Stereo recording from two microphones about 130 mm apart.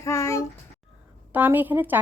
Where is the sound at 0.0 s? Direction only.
20° left (ahead or behind).